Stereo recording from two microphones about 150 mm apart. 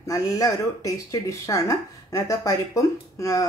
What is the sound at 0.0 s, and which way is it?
Speech, 20° left (ahead or behind).